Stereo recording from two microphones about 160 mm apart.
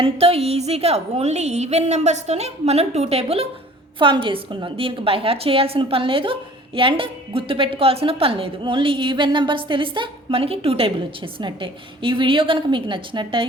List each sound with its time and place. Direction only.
0.0 s a woman's voice: 35° right (ahead or behind)